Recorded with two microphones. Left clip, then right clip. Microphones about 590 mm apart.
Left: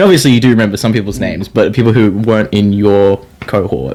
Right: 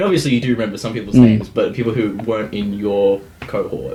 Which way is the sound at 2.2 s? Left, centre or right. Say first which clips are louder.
Left 9 dB; left.